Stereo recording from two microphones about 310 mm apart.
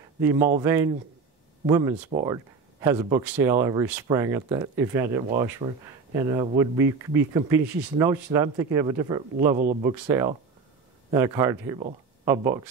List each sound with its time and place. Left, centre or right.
0.2 s speech: centre
9.6 s speech: right
9.8 s speech: centre